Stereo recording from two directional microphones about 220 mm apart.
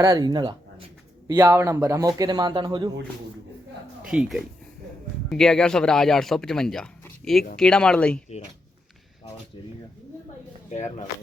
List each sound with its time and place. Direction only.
0.0 s speech: 15° right (ahead or behind)
4.0 s speech: 5° right (ahead or behind)
10.7 s speech: 30° left (ahead or behind)